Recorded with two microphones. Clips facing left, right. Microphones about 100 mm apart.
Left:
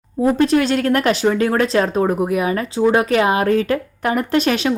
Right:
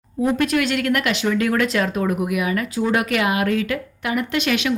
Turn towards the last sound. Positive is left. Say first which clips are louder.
# left 4 dB
turn(degrees=35)  # may be behind; listen again after turning